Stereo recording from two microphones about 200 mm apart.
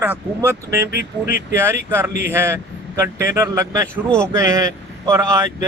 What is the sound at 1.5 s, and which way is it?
A man's voice, 10° right (ahead or behind).